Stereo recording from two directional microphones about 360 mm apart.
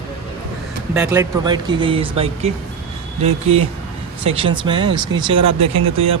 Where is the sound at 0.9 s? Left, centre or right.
Centre.